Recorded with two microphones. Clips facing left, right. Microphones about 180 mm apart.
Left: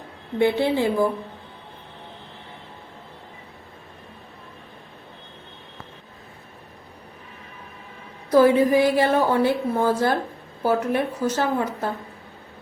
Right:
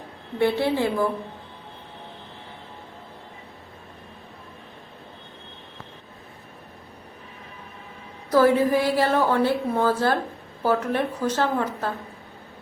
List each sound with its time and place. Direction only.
0.3 s a woman's voice: 15° left (ahead or behind)
8.3 s a woman's voice: 15° left (ahead or behind)